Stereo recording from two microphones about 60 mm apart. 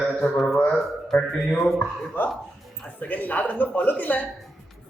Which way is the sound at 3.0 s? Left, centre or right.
Left.